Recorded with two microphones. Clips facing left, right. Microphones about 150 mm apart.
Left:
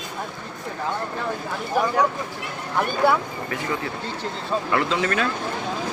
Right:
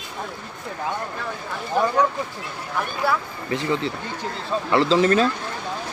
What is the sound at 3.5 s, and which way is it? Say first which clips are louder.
Speech: right 6 dB; 25° right (ahead or behind).